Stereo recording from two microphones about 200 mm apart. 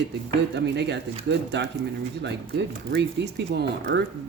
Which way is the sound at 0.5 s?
60° right (ahead or behind).